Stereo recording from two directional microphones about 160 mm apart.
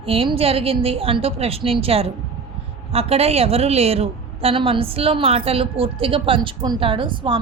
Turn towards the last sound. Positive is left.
turn(degrees=-30)  # may be behind; listen again after turning